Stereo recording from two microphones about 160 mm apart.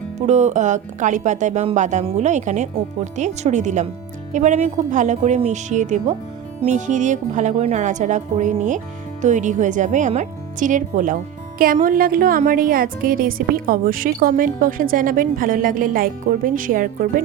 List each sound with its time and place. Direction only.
0.2 s speech: 45° right (ahead or behind)